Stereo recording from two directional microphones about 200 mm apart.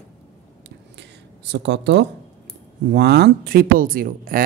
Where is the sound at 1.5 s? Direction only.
60° right (ahead or behind).